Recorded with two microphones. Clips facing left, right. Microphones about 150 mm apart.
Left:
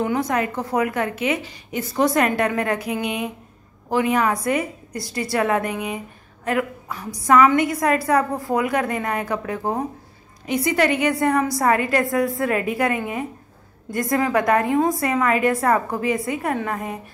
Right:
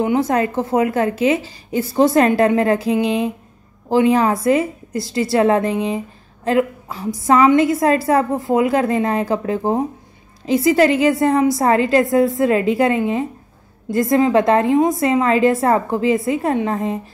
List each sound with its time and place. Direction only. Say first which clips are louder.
0.0 s a woman's voice: right 5 dB; 25° right (ahead or behind)